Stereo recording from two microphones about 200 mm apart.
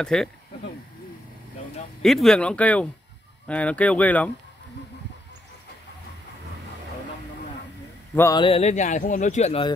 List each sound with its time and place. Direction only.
0.0 s speech: 5° left (ahead or behind)
2.0 s speech: centre (ahead or behind)
8.1 s a sound: 10° left (ahead or behind)
8.4 s speech: 30° left (ahead or behind)